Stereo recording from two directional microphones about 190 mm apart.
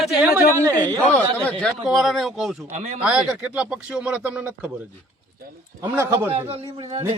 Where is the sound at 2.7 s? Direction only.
35° right (ahead or behind).